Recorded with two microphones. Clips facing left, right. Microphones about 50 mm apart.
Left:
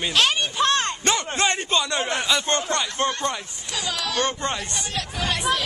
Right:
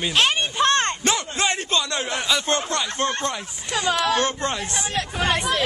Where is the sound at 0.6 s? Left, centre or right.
Right.